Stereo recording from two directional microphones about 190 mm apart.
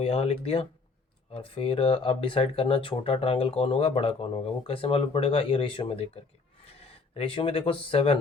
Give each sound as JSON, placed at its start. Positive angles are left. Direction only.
{"t": 0.0, "sound": "speech", "side_deg": 30}